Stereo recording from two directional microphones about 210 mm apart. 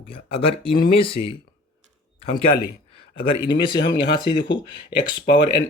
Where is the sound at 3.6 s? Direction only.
20° left (ahead or behind).